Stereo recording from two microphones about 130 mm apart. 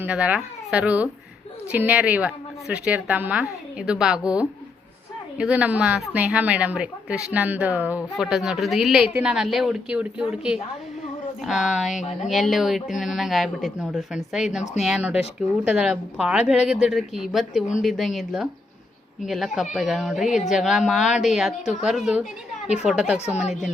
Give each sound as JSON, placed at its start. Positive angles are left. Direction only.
{"t": 0.0, "sound": "a woman's voice", "side_deg": -10}
{"t": 5.4, "sound": "a woman's voice", "side_deg": -10}
{"t": 20.2, "sound": "speech", "side_deg": 65}
{"t": 20.5, "sound": "a woman's voice", "side_deg": 0}